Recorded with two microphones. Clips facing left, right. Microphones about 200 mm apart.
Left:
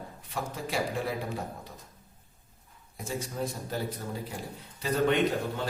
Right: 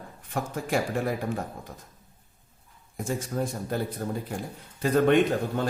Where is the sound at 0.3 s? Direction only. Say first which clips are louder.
Right 6 dB; 50° right (ahead or behind).